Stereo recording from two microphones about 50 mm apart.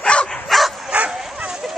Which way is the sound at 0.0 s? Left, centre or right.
Left.